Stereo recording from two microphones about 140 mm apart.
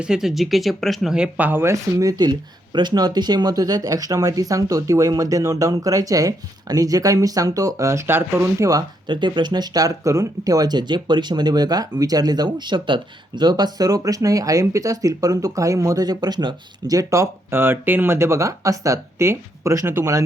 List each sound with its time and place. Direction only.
0.0 s speech: 5° right (ahead or behind); by 20.2 s 20° right (ahead or behind)